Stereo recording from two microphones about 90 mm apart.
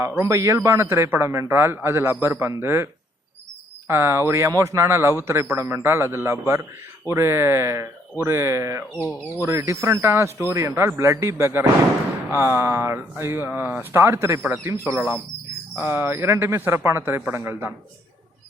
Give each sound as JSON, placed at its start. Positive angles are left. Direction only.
{"t": 0.2, "sound": "a man's voice", "side_deg": -35}